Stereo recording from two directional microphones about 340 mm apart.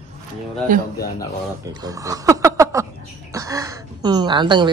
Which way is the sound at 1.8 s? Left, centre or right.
Centre.